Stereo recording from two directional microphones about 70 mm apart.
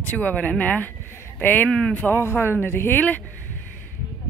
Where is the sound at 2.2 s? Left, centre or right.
Left.